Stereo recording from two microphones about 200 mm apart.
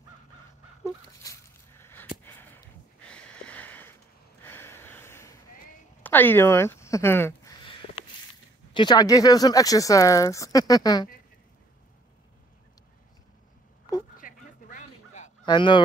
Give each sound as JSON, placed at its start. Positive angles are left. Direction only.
{"t": 1.2, "sound": "a sound", "side_deg": 15}
{"t": 2.2, "sound": "gasp", "side_deg": 10}
{"t": 3.1, "sound": "a sound", "side_deg": 5}
{"t": 6.0, "sound": "speech", "side_deg": 10}
{"t": 8.7, "sound": "speech", "side_deg": 20}
{"t": 14.1, "sound": "bow-wow", "side_deg": 40}
{"t": 15.4, "sound": "speech", "side_deg": 25}